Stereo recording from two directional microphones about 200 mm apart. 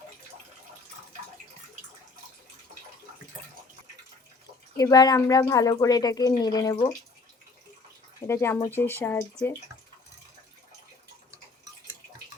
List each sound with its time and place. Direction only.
4.8 s speech: 20° left (ahead or behind)
8.3 s speech: 10° left (ahead or behind)